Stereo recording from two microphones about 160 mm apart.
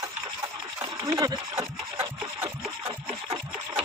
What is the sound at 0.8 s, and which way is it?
Speech, 25° right (ahead or behind).